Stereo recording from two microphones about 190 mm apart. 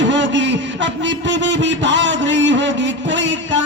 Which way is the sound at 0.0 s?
75° right (ahead or behind).